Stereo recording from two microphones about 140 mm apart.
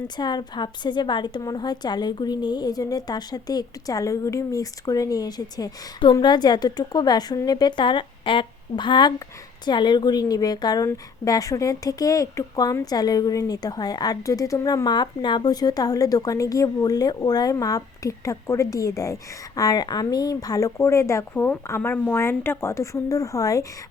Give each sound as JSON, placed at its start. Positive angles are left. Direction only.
{"t": 0.2, "sound": "a woman's voice", "side_deg": 30}